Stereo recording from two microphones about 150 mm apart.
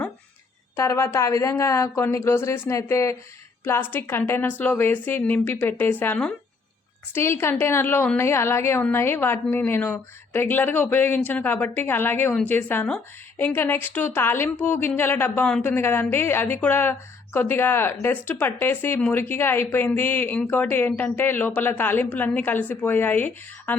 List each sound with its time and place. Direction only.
0.8 s a woman's voice: 20° left (ahead or behind)